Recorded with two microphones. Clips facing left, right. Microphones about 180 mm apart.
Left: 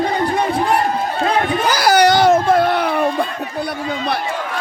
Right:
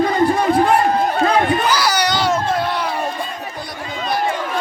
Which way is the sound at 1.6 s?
50° left (ahead or behind).